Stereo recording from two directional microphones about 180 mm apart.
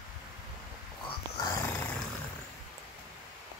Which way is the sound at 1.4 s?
10° left (ahead or behind).